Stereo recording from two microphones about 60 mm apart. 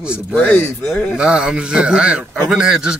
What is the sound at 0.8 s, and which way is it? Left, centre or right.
Speech, centre.